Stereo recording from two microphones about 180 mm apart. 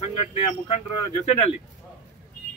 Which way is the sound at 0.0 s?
35° left (ahead or behind).